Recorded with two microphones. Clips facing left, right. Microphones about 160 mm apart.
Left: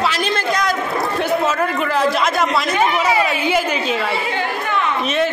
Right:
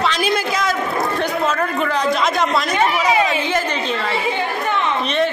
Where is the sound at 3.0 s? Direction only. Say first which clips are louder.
Even; 20° right (ahead or behind).